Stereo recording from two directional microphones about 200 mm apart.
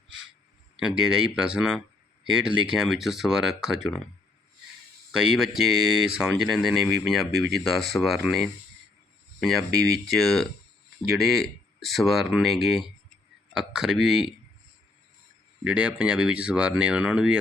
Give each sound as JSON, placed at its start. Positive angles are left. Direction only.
{"t": 0.8, "sound": "speech", "side_deg": -5}
{"t": 5.1, "sound": "speech", "side_deg": -5}
{"t": 15.6, "sound": "speech", "side_deg": -5}